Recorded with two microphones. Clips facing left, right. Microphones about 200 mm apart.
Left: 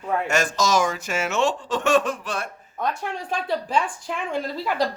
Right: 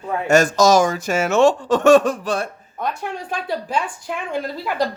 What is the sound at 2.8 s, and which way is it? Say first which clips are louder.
Speech: right 1 dB; centre (ahead or behind).